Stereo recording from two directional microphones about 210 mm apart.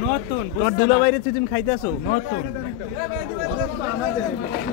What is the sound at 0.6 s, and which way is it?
Speech, 50° left (ahead or behind).